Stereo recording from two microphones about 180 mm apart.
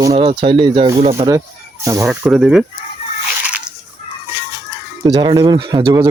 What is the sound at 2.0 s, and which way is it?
Speech, centre (ahead or behind).